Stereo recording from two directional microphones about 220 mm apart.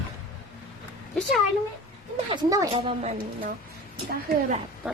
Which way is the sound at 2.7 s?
25° right (ahead or behind).